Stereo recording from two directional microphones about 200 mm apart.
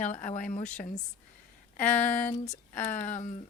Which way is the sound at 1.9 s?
10° left (ahead or behind).